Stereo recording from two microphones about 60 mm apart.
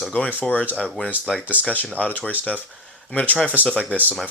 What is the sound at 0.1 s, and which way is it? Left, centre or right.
Speech, left.